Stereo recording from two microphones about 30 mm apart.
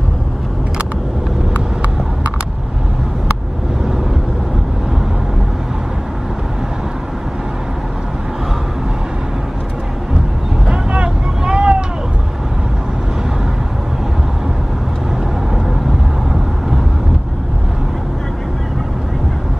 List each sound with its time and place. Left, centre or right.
1.5 s vehicle: right
10.7 s vehicle: right